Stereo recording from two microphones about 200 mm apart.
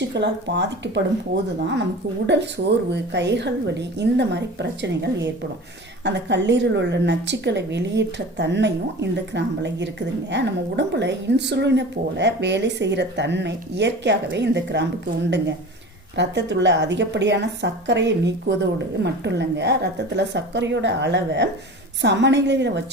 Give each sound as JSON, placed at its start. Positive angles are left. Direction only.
{"t": 0.1, "sound": "a woman's voice", "side_deg": -60}
{"t": 16.1, "sound": "a woman's voice", "side_deg": -60}